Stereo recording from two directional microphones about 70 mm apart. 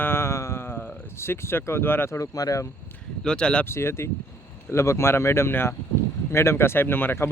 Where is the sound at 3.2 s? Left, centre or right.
Centre.